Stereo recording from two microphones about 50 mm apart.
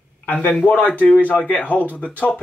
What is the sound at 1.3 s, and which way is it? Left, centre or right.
Speech, left.